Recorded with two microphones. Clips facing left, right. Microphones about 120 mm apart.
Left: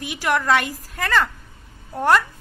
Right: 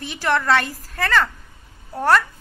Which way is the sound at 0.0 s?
10° left (ahead or behind).